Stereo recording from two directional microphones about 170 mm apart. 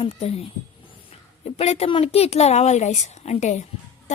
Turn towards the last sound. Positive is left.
turn(degrees=45)  # may be behind; listen again after turning